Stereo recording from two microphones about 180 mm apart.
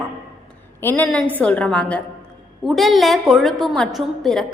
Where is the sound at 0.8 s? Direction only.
15° left (ahead or behind).